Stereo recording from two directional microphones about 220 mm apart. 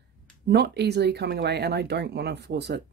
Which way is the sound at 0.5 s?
50° right (ahead or behind).